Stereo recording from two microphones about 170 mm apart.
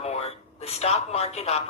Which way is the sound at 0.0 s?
35° left (ahead or behind).